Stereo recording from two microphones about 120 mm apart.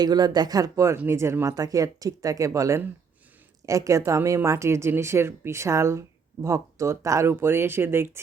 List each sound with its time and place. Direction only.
0.0 s speech: 35° right (ahead or behind); by 8.2 s 20° right (ahead or behind)